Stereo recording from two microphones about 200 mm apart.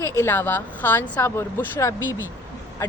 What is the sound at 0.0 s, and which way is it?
Speech, 15° left (ahead or behind).